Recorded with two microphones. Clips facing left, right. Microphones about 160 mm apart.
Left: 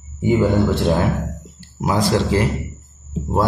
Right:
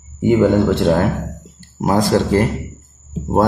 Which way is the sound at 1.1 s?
Centre (ahead or behind).